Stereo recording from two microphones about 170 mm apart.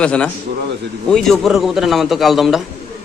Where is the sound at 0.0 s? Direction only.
5° left (ahead or behind).